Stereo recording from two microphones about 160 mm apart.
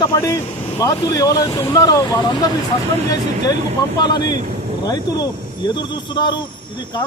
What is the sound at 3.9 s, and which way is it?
A man's voice, 25° left (ahead or behind).